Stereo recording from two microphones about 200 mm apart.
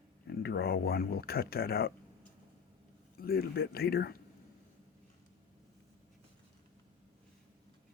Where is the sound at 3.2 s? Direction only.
50° left (ahead or behind).